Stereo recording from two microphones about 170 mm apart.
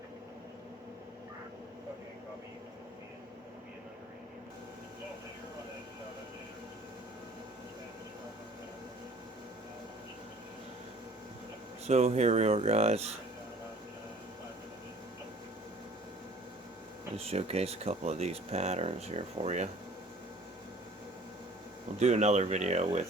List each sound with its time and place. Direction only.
11.9 s speech: 40° right (ahead or behind)
17.2 s speech: 35° right (ahead or behind)
21.9 s speech: 40° right (ahead or behind)